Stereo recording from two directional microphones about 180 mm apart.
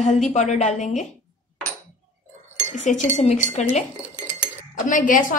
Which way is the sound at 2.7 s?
40° left (ahead or behind).